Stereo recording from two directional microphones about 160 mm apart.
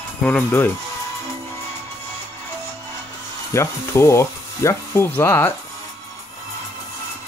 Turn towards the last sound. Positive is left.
turn(degrees=15)  # may be behind; listen again after turning